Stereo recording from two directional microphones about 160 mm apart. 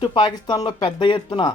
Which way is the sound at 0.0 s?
30° left (ahead or behind).